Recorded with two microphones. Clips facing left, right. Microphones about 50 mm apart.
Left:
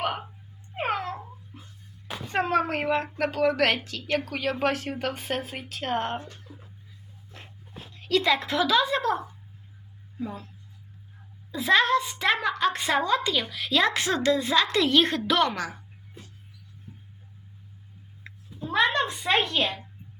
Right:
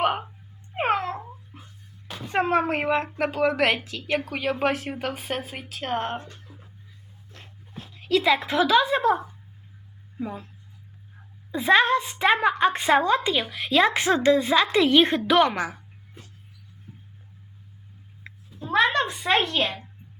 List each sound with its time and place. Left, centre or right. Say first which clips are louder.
0.0 s wail: right 5 dB; right
0.8 s cat: right 4 dB; centre
1.5 s music: right 1 dB; centre
2.2 s a woman's voice: right 2 dB; centre
7.3 s a sound: left 1 dB; centre
7.7 s speech: right 2 dB; centre; by 10.4 s right
11.5 s a woman's voice: right 2 dB; right
18.2 s a sound: left 1 dB; centre
19.2 s speech: right 1 dB; centre